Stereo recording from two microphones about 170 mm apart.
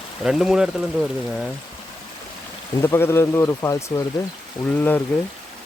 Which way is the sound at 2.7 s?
15° left (ahead or behind).